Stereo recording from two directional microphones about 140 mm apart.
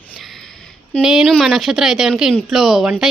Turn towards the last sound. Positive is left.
turn(degrees=-5)  # may be behind; listen again after turning